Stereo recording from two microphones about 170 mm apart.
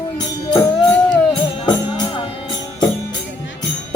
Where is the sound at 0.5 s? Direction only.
25° left (ahead or behind).